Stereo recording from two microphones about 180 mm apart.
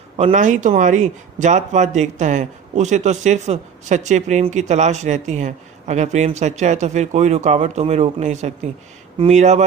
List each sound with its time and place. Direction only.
0.3 s a man's voice: 45° right (ahead or behind)